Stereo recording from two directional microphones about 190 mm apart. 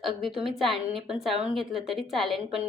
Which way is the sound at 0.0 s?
Centre (ahead or behind).